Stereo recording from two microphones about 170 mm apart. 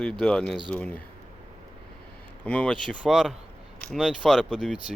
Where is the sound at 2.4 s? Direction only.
5° left (ahead or behind).